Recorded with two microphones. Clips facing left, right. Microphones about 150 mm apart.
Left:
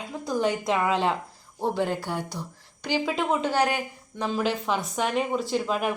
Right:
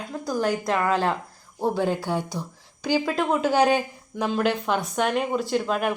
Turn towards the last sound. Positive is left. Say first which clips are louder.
# right 2 dB
turn(degrees=0)  # may be behind; listen again after turning